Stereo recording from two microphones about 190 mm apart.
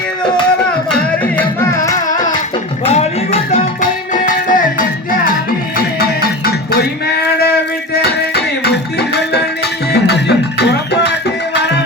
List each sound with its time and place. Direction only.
0.9 s music: 10° left (ahead or behind)
2.8 s music: 35° left (ahead or behind)
7.3 s music: 60° left (ahead or behind)